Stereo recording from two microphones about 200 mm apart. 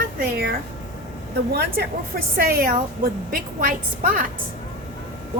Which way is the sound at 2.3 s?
50° right (ahead or behind).